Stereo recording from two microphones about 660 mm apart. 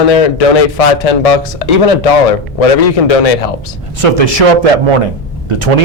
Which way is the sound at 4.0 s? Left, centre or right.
Right.